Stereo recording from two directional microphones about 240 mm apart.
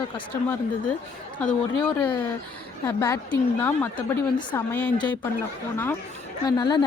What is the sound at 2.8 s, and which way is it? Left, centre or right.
A woman's voice, centre.